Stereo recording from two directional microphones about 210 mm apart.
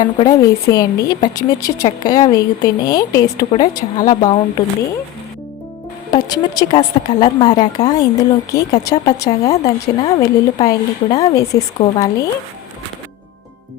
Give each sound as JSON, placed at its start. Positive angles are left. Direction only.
{"t": 0.0, "sound": "a woman's voice", "side_deg": 20}
{"t": 6.1, "sound": "a woman's voice", "side_deg": 20}